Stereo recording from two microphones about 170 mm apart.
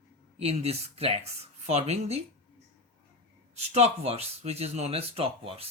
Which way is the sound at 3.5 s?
40° right (ahead or behind).